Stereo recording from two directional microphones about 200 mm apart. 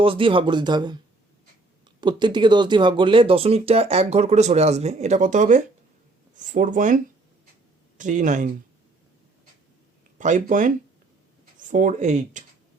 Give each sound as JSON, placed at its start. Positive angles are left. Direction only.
{"t": 0.0, "sound": "speech", "side_deg": -25}
{"t": 2.0, "sound": "speech", "side_deg": -20}
{"t": 10.2, "sound": "speech", "side_deg": -40}